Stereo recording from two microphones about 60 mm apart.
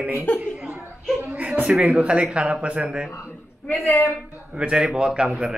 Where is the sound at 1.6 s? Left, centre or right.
Centre.